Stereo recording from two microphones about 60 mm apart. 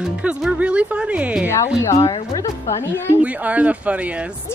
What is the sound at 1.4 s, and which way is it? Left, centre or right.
A woman's voice, left.